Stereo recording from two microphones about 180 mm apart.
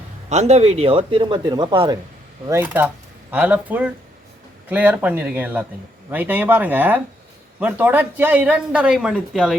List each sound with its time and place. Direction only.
0.3 s speech: 40° right (ahead or behind)
2.5 s speech: 10° right (ahead or behind)